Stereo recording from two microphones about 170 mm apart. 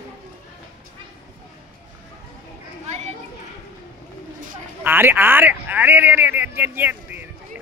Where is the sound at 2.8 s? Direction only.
40° right (ahead or behind).